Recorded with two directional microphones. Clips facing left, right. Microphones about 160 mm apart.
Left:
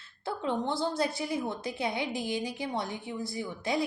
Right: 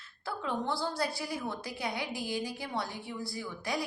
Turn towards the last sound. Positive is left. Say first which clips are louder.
# left 4 dB
turn(degrees=20)  # may be behind; listen again after turning